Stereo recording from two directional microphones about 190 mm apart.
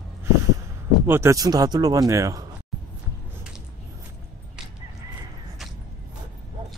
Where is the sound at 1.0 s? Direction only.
15° right (ahead or behind).